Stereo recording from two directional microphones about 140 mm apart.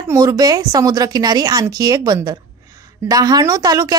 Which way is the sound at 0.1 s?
25° right (ahead or behind).